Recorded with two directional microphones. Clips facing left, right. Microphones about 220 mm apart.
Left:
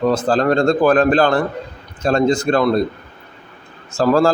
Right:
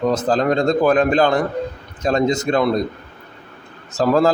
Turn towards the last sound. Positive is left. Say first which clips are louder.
# left 1 dB
turn(degrees=-20)  # may be behind; listen again after turning